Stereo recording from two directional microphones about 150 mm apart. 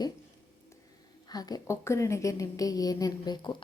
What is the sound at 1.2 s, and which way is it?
A woman's voice, 25° left (ahead or behind).